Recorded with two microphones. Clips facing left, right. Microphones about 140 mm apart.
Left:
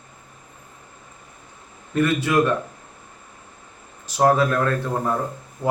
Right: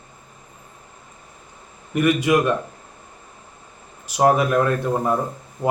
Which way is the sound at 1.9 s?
15° right (ahead or behind).